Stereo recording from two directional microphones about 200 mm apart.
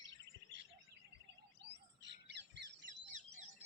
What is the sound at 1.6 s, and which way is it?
Bird, 60° right (ahead or behind).